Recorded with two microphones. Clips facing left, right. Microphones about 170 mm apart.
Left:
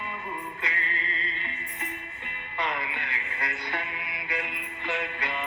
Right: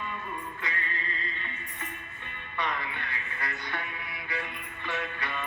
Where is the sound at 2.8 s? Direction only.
15° left (ahead or behind).